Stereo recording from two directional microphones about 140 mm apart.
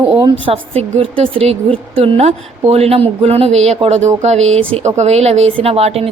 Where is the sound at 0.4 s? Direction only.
45° right (ahead or behind).